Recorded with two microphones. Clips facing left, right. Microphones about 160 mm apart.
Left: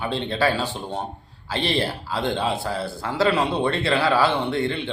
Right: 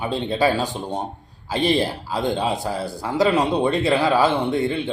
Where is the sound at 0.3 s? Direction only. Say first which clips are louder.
Right 3 dB; 15° right (ahead or behind).